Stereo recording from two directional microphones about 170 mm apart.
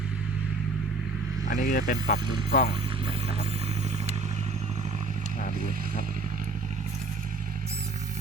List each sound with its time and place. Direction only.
1.5 s speech: 55° left (ahead or behind)